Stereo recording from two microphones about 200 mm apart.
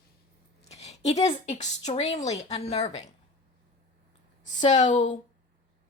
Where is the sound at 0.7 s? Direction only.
35° left (ahead or behind).